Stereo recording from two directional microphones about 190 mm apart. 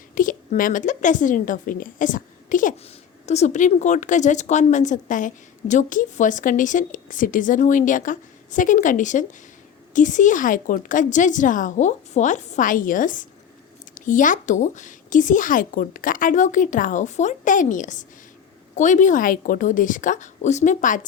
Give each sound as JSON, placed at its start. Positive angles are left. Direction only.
{"t": 0.1, "sound": "a woman's voice", "side_deg": 45}